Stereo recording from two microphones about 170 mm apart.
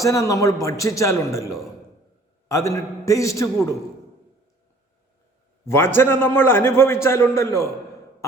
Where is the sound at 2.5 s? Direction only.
20° left (ahead or behind).